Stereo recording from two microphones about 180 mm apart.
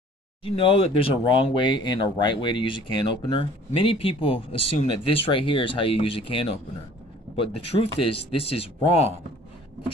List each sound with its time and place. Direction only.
0.4 s speech: 30° left (ahead or behind)